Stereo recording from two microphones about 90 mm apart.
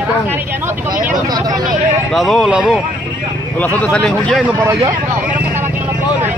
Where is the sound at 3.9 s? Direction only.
10° left (ahead or behind).